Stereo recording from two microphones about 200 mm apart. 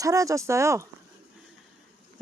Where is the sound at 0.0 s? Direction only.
15° right (ahead or behind).